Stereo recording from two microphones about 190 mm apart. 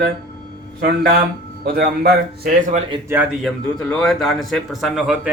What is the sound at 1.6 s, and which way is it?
A man's voice, 55° right (ahead or behind).